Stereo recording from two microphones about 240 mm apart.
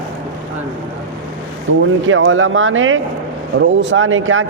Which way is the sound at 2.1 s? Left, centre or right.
Right.